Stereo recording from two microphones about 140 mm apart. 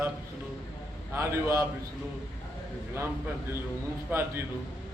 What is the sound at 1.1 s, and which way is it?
Speech, 20° right (ahead or behind).